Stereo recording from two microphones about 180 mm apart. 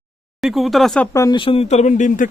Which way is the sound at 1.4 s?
30° left (ahead or behind).